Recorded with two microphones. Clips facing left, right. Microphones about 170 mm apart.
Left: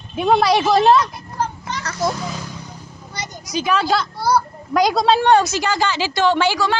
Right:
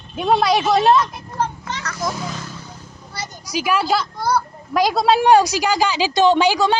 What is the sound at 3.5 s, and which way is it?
A woman's voice, 10° right (ahead or behind).